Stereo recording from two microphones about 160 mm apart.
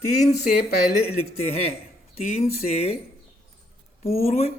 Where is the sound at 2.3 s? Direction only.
40° left (ahead or behind).